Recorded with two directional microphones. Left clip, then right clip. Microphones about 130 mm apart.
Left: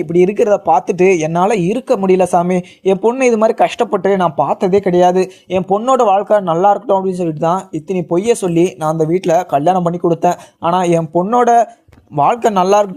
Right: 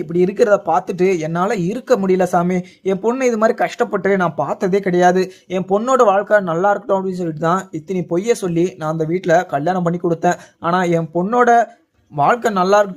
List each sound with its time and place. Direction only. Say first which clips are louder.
0.0 s speech: left 3 dB; 15° left (ahead or behind)